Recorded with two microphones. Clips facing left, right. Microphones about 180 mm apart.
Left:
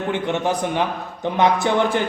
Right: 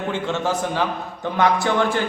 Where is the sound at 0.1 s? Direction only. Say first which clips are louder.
Left 2 dB; 20° left (ahead or behind).